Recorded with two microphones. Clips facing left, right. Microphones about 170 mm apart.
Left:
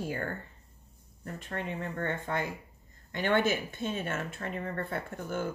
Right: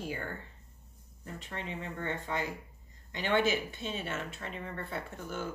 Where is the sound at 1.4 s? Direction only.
55° left (ahead or behind).